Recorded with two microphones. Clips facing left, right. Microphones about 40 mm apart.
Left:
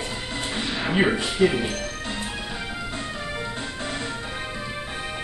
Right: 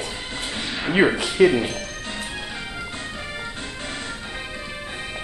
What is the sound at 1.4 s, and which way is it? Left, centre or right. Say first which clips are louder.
Speech: right 5 dB; right.